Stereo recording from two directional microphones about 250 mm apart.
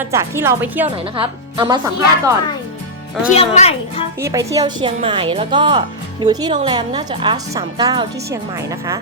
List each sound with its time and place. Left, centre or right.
0.0 s speech: centre
0.9 s a woman's voice: right
3.3 s a woman's voice: left
4.2 s speech: centre